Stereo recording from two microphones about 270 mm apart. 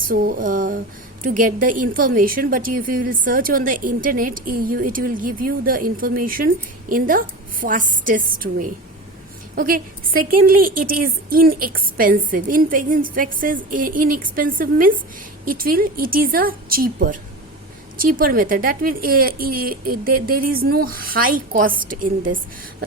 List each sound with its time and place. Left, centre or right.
0.0 s a woman's voice: right